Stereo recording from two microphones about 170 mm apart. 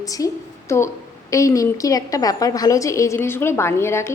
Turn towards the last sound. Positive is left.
turn(degrees=15)  # may be behind; listen again after turning